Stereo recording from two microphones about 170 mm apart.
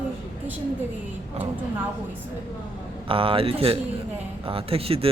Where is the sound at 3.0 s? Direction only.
30° right (ahead or behind).